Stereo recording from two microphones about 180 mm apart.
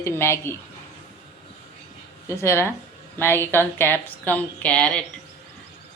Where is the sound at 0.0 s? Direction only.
15° left (ahead or behind).